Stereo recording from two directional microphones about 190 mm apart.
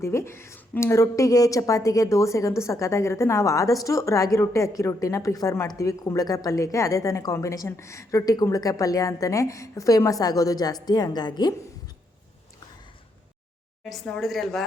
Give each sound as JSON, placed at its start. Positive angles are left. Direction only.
{"t": 0.0, "sound": "a woman's voice", "side_deg": 15}
{"t": 13.9, "sound": "speech", "side_deg": 0}